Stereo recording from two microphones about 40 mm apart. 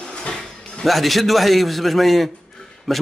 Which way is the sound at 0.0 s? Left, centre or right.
Left.